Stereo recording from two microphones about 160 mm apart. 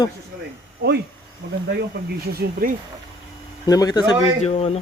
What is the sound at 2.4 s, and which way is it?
Speech, 65° right (ahead or behind).